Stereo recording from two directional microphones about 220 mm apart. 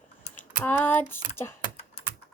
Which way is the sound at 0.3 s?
10° left (ahead or behind).